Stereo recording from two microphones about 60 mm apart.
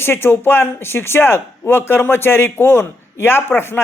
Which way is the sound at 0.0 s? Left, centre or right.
Left.